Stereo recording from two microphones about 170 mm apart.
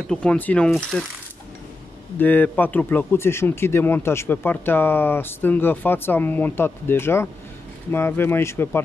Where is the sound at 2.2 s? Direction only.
10° left (ahead or behind).